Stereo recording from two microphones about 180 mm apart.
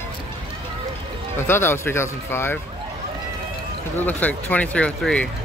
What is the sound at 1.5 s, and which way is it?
Speech, 15° left (ahead or behind).